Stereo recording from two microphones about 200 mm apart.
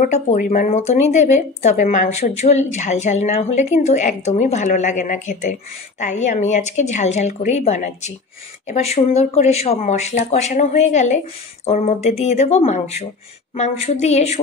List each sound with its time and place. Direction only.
0.0 s speech: 40° left (ahead or behind)